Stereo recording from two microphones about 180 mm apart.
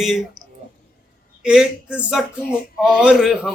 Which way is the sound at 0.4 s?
20° right (ahead or behind).